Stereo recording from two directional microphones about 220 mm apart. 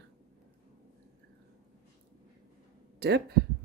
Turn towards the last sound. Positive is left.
turn(degrees=-45)  # may be behind; listen again after turning